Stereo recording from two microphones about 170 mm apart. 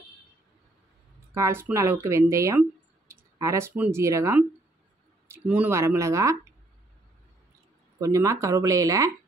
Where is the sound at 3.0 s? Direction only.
15° right (ahead or behind).